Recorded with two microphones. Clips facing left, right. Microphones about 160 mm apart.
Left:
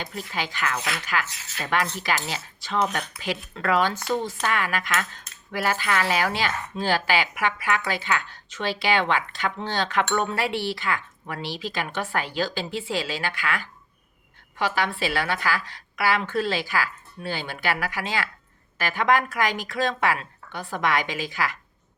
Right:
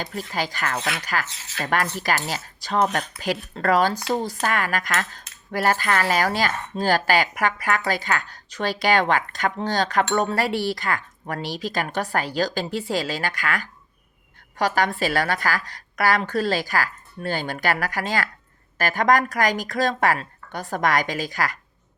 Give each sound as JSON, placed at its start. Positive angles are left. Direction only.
{"t": 0.0, "sound": "cutlery", "side_deg": -45}
{"t": 1.5, "sound": "a woman's voice", "side_deg": -45}
{"t": 4.1, "sound": "cutlery", "side_deg": -40}
{"t": 14.6, "sound": "a woman's voice", "side_deg": -40}
{"t": 18.8, "sound": "cutlery", "side_deg": -40}